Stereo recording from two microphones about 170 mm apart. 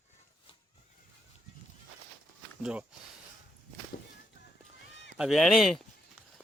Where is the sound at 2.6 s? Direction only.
5° right (ahead or behind).